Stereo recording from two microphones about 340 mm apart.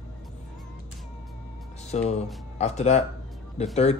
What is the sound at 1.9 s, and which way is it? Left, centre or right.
Speech, centre.